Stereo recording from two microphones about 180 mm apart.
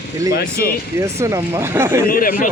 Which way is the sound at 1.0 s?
15° right (ahead or behind).